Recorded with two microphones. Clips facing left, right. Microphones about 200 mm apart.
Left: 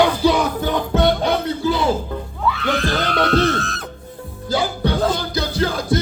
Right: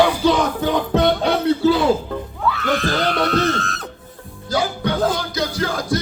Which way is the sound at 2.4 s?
Centre (ahead or behind).